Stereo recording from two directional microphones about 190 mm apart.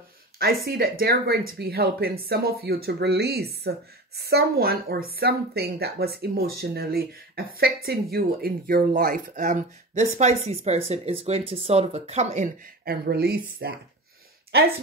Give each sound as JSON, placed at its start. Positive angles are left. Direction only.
{"t": 0.4, "sound": "speech", "side_deg": -55}
{"t": 12.8, "sound": "speech", "side_deg": -55}